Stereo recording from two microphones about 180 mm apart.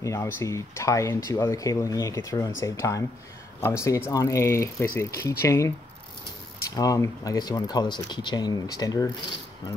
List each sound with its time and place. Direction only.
0.0 s speech: 15° left (ahead or behind)
6.7 s speech: 20° left (ahead or behind)